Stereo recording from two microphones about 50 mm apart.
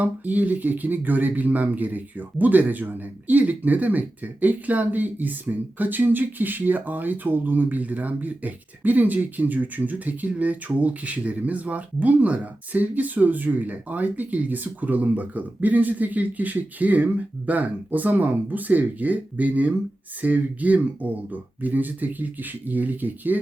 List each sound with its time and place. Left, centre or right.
0.0 s speech: right